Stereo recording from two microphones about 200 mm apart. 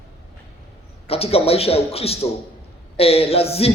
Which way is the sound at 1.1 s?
30° left (ahead or behind).